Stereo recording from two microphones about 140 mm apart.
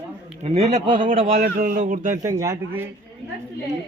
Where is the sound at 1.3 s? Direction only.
80° right; by 2.1 s 65° right (ahead or behind).